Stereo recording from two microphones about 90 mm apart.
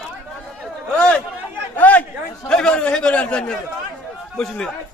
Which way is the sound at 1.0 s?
10° left (ahead or behind).